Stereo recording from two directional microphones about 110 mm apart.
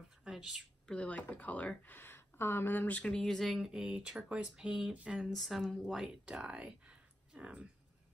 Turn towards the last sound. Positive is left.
turn(degrees=-10)  # may be behind; listen again after turning